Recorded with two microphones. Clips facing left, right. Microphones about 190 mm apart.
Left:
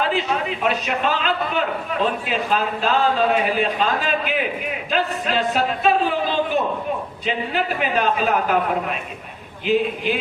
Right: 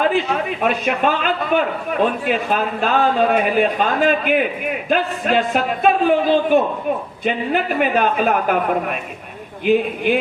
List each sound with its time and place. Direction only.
0.6 s a man's voice: 50° right (ahead or behind)